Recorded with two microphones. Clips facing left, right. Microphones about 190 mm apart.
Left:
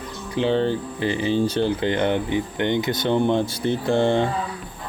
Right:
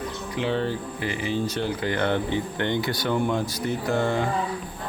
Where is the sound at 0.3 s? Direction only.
30° left (ahead or behind).